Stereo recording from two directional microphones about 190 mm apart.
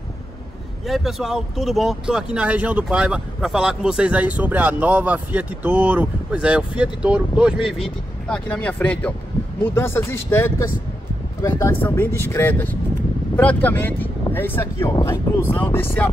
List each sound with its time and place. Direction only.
0.8 s speech: centre (ahead or behind)